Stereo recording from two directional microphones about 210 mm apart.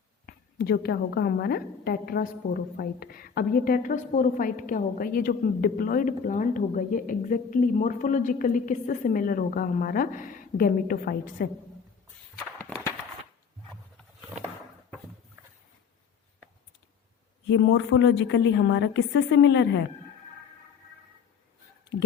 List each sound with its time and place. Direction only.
0.3 s a woman's voice: 50° left (ahead or behind)
12.5 s a sound: 10° left (ahead or behind)
17.5 s a woman's voice: 60° left (ahead or behind)